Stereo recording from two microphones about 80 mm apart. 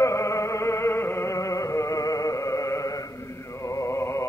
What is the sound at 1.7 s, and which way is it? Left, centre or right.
Music, left.